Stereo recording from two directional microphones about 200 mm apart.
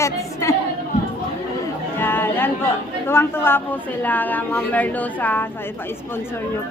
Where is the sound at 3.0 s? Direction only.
10° left (ahead or behind).